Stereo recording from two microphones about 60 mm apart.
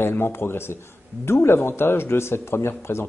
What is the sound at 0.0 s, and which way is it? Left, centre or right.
Speech, left.